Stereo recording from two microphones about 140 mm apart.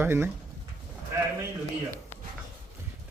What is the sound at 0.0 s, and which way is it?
Speech, 15° right (ahead or behind).